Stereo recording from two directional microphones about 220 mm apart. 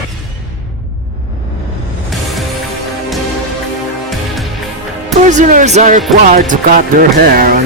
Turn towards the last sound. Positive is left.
turn(degrees=-40)  # may be behind; listen again after turning